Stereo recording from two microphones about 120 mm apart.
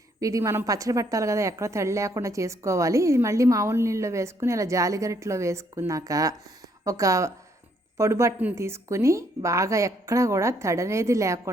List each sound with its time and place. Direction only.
0.2 s a woman's voice: 30° right (ahead or behind)